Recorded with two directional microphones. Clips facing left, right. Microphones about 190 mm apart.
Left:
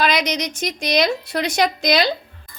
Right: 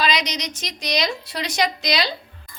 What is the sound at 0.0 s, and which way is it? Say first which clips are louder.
A woman's voice: left 4 dB; 55° left (ahead or behind).